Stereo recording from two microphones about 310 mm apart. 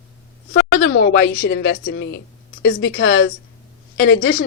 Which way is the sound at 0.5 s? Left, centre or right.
Left.